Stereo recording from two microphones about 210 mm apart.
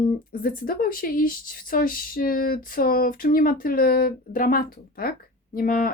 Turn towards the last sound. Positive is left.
turn(degrees=45)  # may be behind; listen again after turning